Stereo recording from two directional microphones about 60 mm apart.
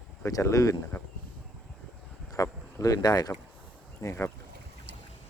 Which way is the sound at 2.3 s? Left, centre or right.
Left.